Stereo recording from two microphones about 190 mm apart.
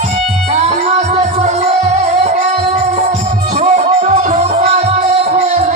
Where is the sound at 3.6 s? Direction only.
35° right (ahead or behind).